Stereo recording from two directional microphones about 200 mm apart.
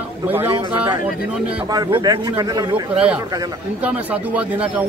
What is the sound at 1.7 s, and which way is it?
A man's voice, 20° right (ahead or behind).